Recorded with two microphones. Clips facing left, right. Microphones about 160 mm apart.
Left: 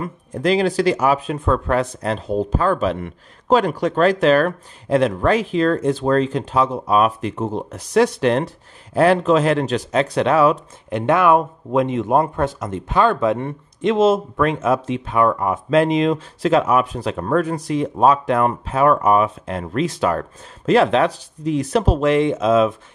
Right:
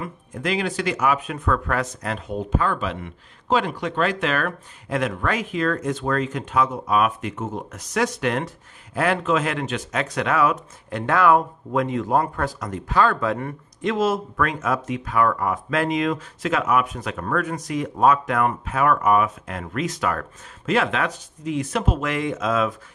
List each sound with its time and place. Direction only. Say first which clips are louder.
0.0 s speech: left 7 dB; 35° left (ahead or behind)